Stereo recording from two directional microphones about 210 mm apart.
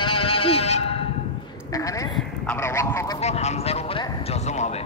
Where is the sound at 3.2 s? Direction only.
30° left (ahead or behind).